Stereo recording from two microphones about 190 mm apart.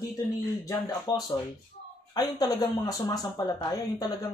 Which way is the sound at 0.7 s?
20° left (ahead or behind).